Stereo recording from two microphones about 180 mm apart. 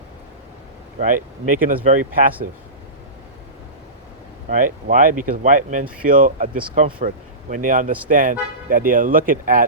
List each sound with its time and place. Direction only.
0.9 s speech: 45° right (ahead or behind)
4.4 s speech: 45° right (ahead or behind)